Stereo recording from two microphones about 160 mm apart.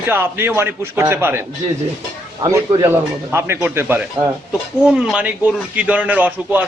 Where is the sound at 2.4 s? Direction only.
20° right (ahead or behind).